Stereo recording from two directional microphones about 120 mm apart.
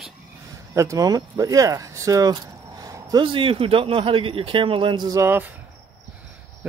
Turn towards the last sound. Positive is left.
turn(degrees=-25)  # may be behind; listen again after turning